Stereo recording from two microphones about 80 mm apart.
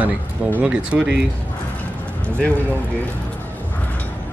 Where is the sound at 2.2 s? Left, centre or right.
Centre.